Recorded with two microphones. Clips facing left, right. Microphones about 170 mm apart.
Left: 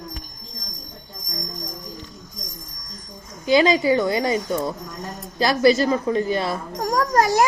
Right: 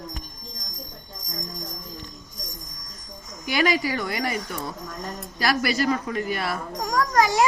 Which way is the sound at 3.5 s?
25° left (ahead or behind).